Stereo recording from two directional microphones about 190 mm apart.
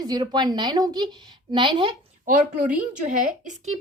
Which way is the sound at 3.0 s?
40° right (ahead or behind).